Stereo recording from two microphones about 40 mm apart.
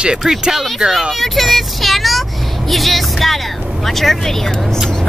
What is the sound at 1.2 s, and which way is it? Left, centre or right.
Speech, centre.